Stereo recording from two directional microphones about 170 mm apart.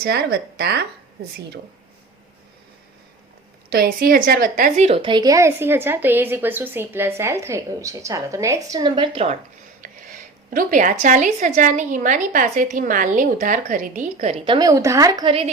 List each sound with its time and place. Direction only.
0.0 s speech: 70° right (ahead or behind)
3.7 s a woman's voice: 60° right (ahead or behind)
4.9 s a woman's voice: 30° right (ahead or behind)
9.8 s a woman's voice: 50° right (ahead or behind); by 15.4 s 30° right (ahead or behind)